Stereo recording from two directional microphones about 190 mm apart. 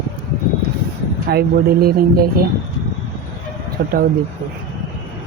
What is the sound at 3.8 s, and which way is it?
Speech, 60° right (ahead or behind).